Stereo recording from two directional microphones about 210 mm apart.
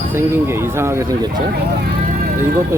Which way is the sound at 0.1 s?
10° right (ahead or behind).